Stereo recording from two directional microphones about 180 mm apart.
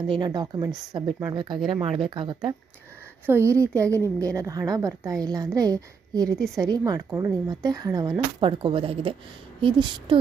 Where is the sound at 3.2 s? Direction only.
15° right (ahead or behind).